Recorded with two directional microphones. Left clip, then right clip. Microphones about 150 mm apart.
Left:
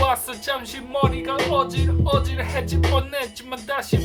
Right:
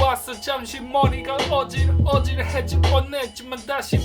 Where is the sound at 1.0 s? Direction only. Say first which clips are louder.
Left 1 dB; 20° right (ahead or behind).